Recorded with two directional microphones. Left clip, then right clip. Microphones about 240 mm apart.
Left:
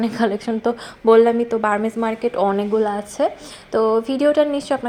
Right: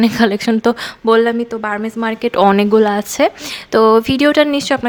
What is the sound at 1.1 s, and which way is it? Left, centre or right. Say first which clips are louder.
A woman's voice: even; centre.